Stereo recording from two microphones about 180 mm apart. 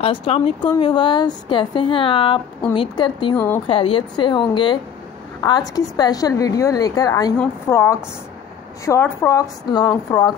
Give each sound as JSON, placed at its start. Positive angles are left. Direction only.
{"t": 0.0, "sound": "a woman's voice", "side_deg": 30}
{"t": 3.3, "sound": "a woman's voice", "side_deg": 10}
{"t": 3.6, "sound": "a woman's voice", "side_deg": 30}